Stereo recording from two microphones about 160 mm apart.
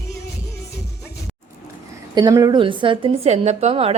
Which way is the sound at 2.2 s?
25° right (ahead or behind).